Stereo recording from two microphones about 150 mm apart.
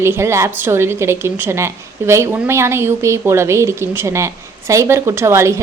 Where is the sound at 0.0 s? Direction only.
15° right (ahead or behind).